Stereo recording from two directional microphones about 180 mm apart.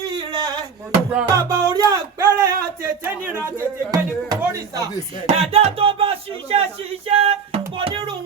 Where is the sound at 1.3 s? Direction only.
15° right (ahead or behind).